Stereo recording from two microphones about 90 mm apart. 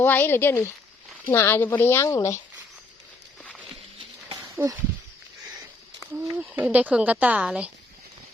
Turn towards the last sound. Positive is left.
turn(degrees=-15)  # may be behind; listen again after turning